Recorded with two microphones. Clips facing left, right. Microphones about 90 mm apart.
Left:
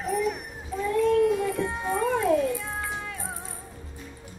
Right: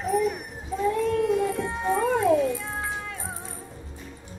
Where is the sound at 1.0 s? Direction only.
Centre (ahead or behind).